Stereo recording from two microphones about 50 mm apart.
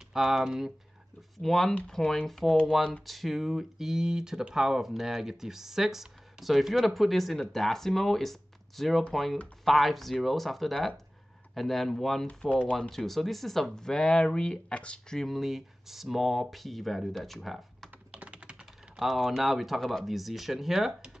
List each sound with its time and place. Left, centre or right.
0.1 s speech: centre
1.4 s speech: centre
12.3 s speech: left
12.9 s speech: centre; by 15.1 s left
15.1 s speech: centre
18.1 s typing: right
18.9 s speech: centre